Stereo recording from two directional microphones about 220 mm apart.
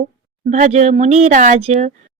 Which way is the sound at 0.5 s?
35° right (ahead or behind).